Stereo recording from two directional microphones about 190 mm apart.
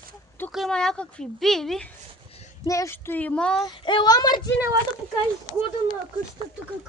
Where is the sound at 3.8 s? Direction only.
25° left (ahead or behind).